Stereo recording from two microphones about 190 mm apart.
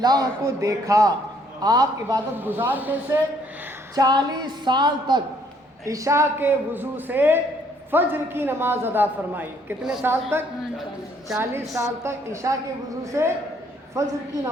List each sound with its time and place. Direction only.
0.0 s a man's voice: 20° right (ahead or behind)
3.9 s a woman's voice: 20° right (ahead or behind)
11.3 s a man's voice: 15° right (ahead or behind)